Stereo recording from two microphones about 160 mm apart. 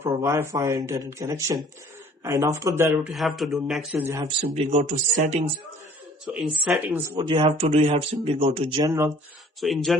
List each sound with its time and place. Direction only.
0.0 s a man's voice: 15° right (ahead or behind)
3.9 s speech: 15° right (ahead or behind)
4.5 s speech: 40° right (ahead or behind)
6.3 s speech: 5° right (ahead or behind)
7.2 s speech: 30° right (ahead or behind)
8.8 s a man's voice: 20° right (ahead or behind)
9.6 s speech: centre (ahead or behind)